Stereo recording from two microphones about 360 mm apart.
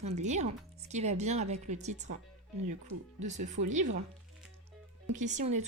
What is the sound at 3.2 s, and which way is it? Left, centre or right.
Speech, centre.